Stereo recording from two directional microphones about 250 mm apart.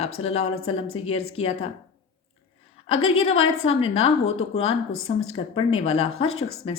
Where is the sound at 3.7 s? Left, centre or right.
Left.